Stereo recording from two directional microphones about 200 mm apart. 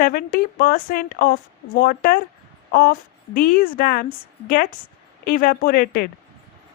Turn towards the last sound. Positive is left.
turn(degrees=45)  # may be behind; listen again after turning